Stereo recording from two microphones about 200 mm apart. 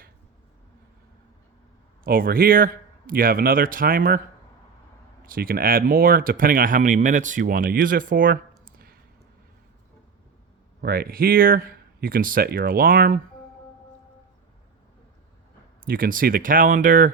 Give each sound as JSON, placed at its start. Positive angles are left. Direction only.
{"t": 2.0, "sound": "speech", "side_deg": -45}
{"t": 5.2, "sound": "speech", "side_deg": -45}
{"t": 10.8, "sound": "speech", "side_deg": -50}
{"t": 15.9, "sound": "speech", "side_deg": -45}